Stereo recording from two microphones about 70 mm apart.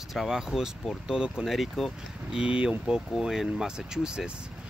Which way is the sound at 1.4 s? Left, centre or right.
Centre.